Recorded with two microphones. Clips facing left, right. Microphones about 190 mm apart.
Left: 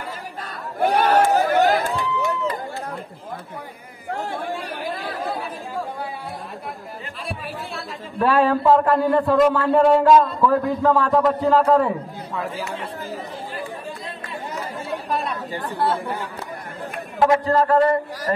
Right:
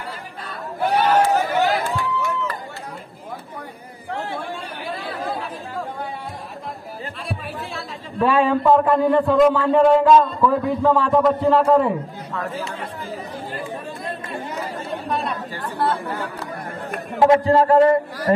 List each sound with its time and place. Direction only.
0.5 s chatter: 50° left (ahead or behind)
7.2 s a man's voice: centre (ahead or behind)
15.0 s chatter: centre (ahead or behind)
15.5 s speech: 15° left (ahead or behind)
17.2 s a sound: 25° right (ahead or behind)